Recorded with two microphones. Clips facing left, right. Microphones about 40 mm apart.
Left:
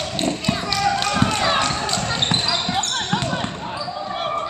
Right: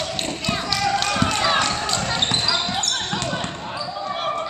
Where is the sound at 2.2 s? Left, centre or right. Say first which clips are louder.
Left 1 dB; centre.